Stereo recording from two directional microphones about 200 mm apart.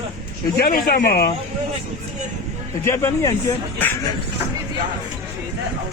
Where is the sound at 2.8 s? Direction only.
15° left (ahead or behind).